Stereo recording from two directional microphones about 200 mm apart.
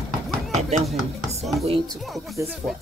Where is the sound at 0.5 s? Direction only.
35° right (ahead or behind).